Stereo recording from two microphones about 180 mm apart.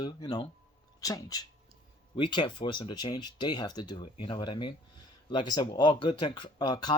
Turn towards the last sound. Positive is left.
turn(degrees=25)  # may be behind; listen again after turning